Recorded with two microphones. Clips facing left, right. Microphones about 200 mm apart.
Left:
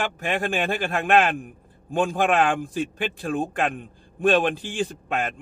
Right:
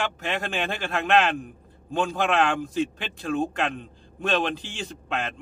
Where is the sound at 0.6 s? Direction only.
45° left (ahead or behind).